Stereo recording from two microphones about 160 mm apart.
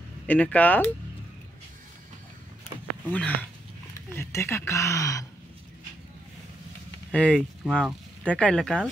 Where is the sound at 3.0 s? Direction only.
10° left (ahead or behind).